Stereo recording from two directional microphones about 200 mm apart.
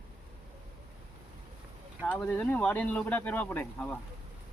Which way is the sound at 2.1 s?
5° left (ahead or behind).